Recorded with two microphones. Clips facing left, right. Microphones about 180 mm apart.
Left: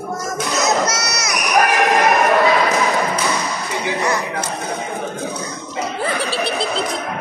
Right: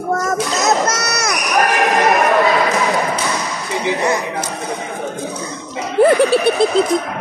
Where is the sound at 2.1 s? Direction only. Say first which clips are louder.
Right 2 dB; centre (ahead or behind).